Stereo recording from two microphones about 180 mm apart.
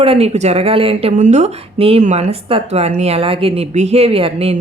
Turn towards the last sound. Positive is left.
turn(degrees=-30)  # may be behind; listen again after turning